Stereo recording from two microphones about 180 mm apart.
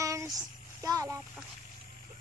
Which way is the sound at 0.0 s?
15° right (ahead or behind).